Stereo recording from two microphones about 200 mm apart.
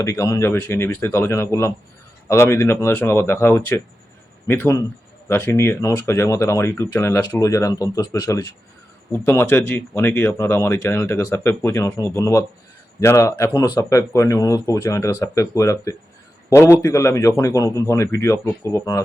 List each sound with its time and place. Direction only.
0.0 s speech: 15° left (ahead or behind)